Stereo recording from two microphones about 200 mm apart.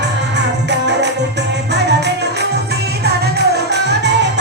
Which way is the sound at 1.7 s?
55° right (ahead or behind).